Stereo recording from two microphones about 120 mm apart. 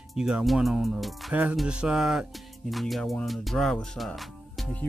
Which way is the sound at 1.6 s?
10° right (ahead or behind).